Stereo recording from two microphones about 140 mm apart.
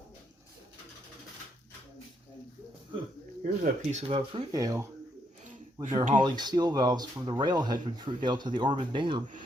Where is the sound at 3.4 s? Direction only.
60° right (ahead or behind).